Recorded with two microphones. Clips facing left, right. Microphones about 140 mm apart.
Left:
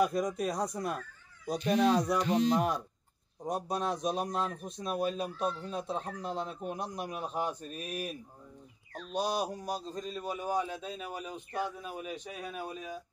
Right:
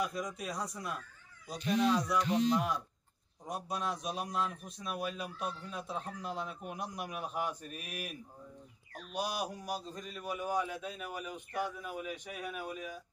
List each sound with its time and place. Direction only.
0.0 s a man's voice: 50° left (ahead or behind); by 8.2 s 30° left (ahead or behind)
9.2 s a man's voice: 30° left (ahead or behind)